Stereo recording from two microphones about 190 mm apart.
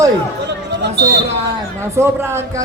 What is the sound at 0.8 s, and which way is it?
Speech, 65° right (ahead or behind).